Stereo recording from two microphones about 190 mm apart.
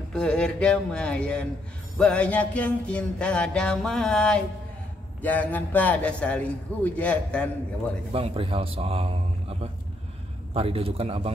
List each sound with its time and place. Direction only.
0.1 s a sound: 5° left (ahead or behind)
5.2 s a man's voice: 10° left (ahead or behind)
8.1 s a man's voice: 30° right (ahead or behind)